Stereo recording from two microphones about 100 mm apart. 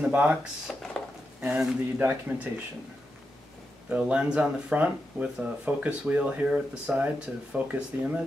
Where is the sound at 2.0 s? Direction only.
20° right (ahead or behind).